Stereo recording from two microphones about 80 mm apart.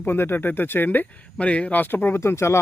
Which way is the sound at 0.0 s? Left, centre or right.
Left.